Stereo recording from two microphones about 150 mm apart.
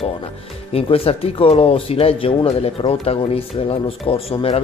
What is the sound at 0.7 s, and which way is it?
Speech, 40° left (ahead or behind).